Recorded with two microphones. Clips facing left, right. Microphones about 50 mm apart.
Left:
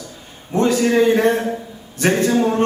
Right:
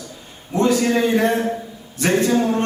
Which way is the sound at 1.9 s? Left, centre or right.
Left.